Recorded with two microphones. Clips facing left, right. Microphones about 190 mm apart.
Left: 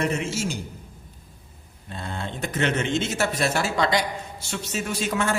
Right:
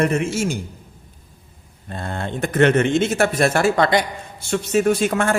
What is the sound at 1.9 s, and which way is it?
A man's voice, 55° right (ahead or behind).